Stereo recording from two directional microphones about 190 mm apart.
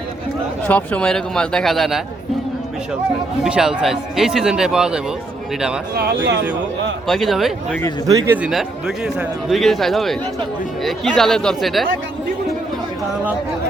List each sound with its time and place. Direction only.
0.7 s speech: 5° left (ahead or behind)
3.4 s speech: 5° right (ahead or behind)
5.9 s speech: 55° right (ahead or behind)
7.1 s speech: centre (ahead or behind)
8.0 s speech: 20° right (ahead or behind)
8.4 s speech: 5° right (ahead or behind)